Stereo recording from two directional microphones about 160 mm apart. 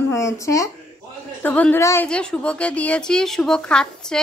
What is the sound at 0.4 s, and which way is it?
A woman's voice, 20° left (ahead or behind).